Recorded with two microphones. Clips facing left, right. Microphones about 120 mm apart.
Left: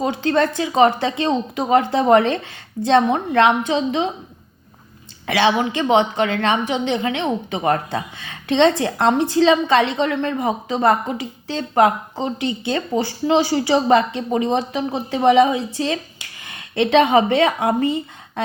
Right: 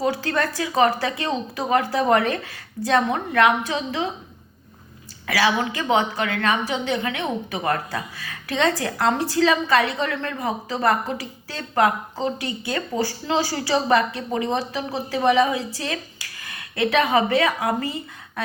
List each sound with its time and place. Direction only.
0.0 s a woman's voice: 20° left (ahead or behind)
5.2 s a woman's voice: 25° left (ahead or behind)